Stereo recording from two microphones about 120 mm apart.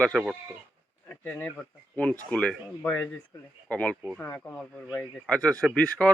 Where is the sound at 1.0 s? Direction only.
15° left (ahead or behind).